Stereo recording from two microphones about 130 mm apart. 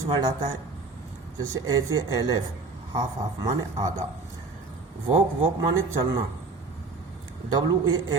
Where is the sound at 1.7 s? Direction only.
30° right (ahead or behind).